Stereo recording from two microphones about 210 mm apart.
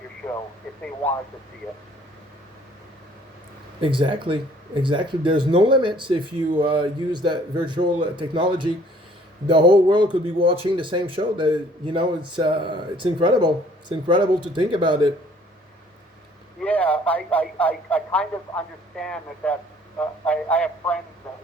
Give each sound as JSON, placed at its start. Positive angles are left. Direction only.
{"t": 3.8, "sound": "speech", "side_deg": -25}
{"t": 16.6, "sound": "a man's voice", "side_deg": 5}